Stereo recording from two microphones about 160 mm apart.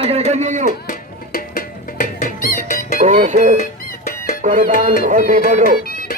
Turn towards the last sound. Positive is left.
turn(degrees=75)  # may be behind; listen again after turning